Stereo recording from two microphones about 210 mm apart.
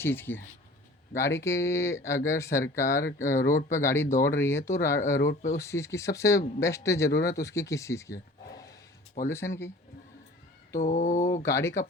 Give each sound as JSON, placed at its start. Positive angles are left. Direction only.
{"t": 0.0, "sound": "speech", "side_deg": 10}
{"t": 10.8, "sound": "mantra", "side_deg": 35}
{"t": 11.4, "sound": "speech", "side_deg": 15}